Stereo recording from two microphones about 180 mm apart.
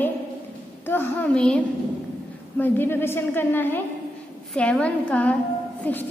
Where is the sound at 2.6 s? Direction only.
10° left (ahead or behind).